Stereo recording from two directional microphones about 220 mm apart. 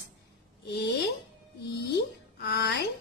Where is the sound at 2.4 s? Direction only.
50° left (ahead or behind).